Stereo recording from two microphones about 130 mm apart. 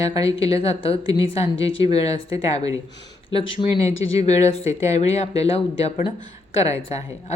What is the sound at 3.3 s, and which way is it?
Speech, 45° left (ahead or behind).